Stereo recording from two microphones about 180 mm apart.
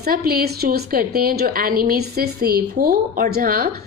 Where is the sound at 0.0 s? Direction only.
55° right (ahead or behind).